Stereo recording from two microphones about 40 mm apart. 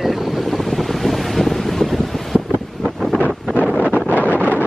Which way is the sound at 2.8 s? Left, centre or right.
Centre.